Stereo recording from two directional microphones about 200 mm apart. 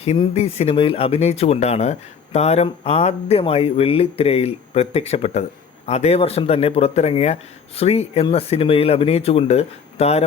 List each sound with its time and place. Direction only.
0.0 s speech: 30° left (ahead or behind)